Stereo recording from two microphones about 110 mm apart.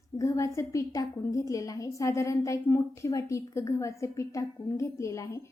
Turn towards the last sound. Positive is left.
turn(degrees=30)  # may be behind; listen again after turning